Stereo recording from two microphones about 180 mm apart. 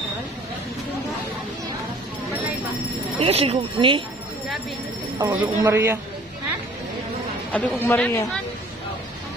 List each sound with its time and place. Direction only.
3.2 s speech: 35° right (ahead or behind)
5.3 s speech: 10° right (ahead or behind)
7.5 s speech: 10° left (ahead or behind)